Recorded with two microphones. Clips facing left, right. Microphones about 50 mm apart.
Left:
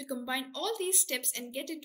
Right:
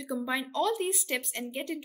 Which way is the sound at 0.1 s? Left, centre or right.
Centre.